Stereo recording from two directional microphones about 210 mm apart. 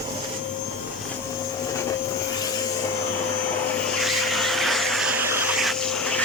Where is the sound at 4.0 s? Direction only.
Centre (ahead or behind).